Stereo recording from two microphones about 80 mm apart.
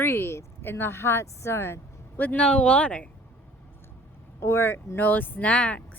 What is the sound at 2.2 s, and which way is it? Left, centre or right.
Speech, left.